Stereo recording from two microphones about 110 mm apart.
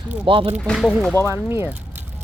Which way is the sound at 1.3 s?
20° right (ahead or behind).